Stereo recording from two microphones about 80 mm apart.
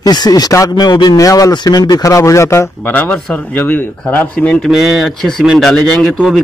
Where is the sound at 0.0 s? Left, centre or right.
Left.